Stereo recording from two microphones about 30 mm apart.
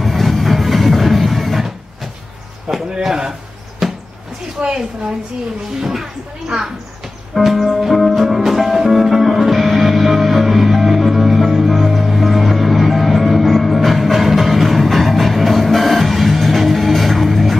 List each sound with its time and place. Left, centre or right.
0.0 s music: centre
2.7 s a sound: right
3.8 s a sound: centre
4.6 s speech: right
6.4 s speech: right
7.3 s music: centre